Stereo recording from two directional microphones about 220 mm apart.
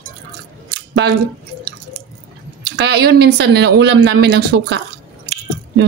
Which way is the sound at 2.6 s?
50° right (ahead or behind).